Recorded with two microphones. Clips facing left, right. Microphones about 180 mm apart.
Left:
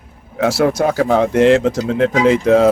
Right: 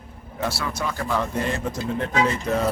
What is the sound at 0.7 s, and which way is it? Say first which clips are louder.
Speech: left 12 dB; 80° left.